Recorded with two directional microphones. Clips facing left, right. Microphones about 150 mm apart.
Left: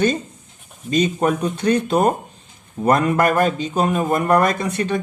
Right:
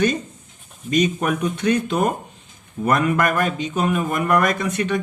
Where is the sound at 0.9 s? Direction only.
30° left (ahead or behind).